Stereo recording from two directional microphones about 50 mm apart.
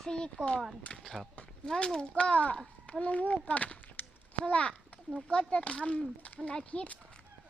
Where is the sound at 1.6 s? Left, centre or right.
Centre.